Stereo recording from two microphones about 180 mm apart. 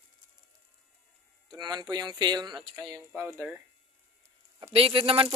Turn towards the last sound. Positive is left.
turn(degrees=-30)  # may be behind; listen again after turning